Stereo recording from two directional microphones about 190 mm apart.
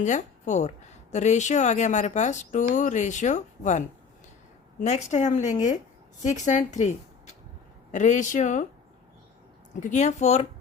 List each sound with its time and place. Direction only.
0.0 s speech: 40° left (ahead or behind)
9.8 s speech: 40° left (ahead or behind)